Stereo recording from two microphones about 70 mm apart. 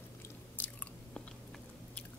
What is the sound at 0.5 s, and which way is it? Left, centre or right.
Chewing, left.